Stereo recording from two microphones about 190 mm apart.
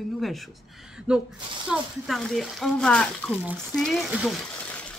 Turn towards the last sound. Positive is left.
turn(degrees=5)  # may be behind; listen again after turning